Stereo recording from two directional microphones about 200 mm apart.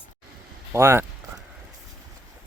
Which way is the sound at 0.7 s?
10° right (ahead or behind).